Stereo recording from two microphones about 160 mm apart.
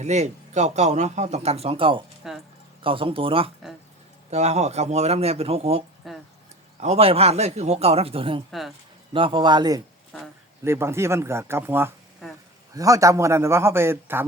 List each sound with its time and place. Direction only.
0.0 s a man's voice: 45° right (ahead or behind)
6.0 s a sound: centre (ahead or behind)
6.7 s a man's voice: 40° right (ahead or behind)
8.4 s speech: centre (ahead or behind)
9.1 s a man's voice: 30° right (ahead or behind); by 14.3 s 15° right (ahead or behind)